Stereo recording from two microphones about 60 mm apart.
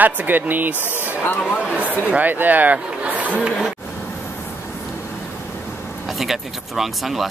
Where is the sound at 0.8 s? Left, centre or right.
Left.